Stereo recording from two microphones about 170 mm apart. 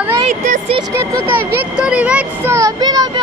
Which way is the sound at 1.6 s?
5° right (ahead or behind).